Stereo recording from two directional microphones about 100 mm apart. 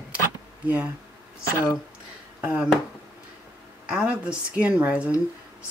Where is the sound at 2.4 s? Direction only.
10° right (ahead or behind).